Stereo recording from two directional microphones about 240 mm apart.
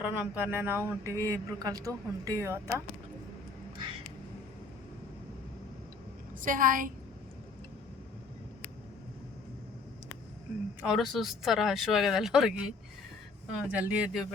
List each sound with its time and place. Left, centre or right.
0.0 s speech: centre
6.4 s a woman's voice: right
10.8 s speech: centre